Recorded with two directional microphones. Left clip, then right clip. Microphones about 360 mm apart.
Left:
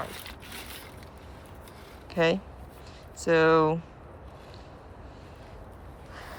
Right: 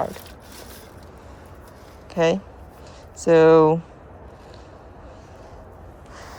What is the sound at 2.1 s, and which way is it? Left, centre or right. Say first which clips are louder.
Speech: right 5 dB; centre.